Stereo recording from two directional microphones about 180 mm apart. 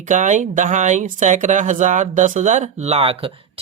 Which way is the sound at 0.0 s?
45° right (ahead or behind).